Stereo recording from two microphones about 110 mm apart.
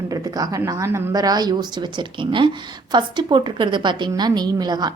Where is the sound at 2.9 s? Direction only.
45° right (ahead or behind).